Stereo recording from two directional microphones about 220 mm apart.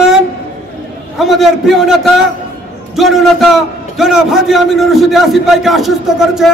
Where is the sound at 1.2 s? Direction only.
Centre (ahead or behind).